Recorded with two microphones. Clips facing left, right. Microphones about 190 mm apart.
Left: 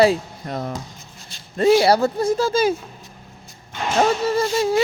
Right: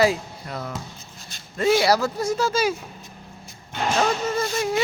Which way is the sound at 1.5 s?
30° left (ahead or behind).